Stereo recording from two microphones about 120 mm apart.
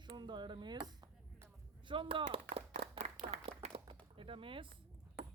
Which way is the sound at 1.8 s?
45° right (ahead or behind).